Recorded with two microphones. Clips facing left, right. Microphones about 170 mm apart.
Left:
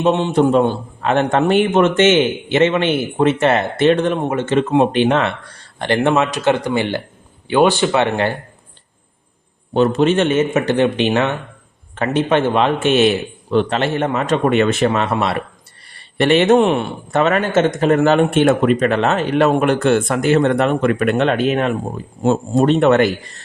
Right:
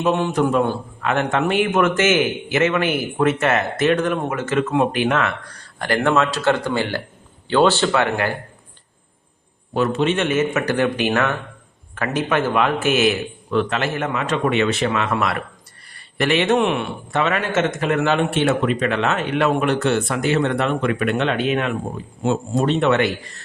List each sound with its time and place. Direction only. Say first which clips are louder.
0.0 s a man's voice: left 4 dB; 25° left (ahead or behind)
10.0 s a man's voice: left 4 dB; 35° left (ahead or behind)